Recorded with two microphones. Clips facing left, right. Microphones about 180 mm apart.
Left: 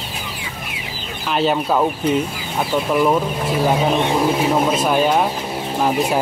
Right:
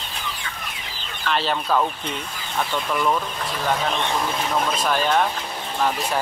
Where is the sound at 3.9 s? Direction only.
25° left (ahead or behind).